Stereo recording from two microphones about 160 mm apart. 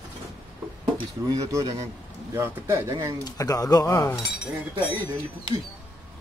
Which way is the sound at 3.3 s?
20° left (ahead or behind).